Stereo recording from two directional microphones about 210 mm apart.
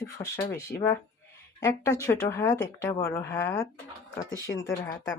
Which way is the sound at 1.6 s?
15° left (ahead or behind).